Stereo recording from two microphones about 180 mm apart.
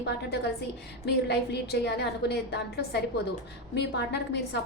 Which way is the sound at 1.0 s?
65° left (ahead or behind).